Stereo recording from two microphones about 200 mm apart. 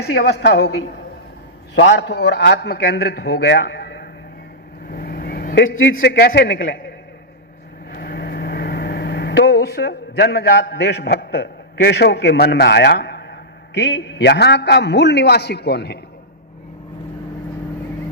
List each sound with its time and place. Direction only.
0.0 s a man's voice: 50° left (ahead or behind)
1.7 s a man's voice: 60° left (ahead or behind)
4.9 s vehicle: 50° left (ahead or behind)
5.9 s a man's voice: 55° left (ahead or behind)
7.9 s speech: 55° left (ahead or behind)